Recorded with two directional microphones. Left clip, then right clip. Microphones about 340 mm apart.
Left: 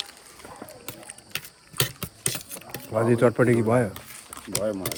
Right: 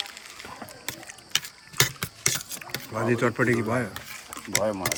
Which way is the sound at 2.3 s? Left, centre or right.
Centre.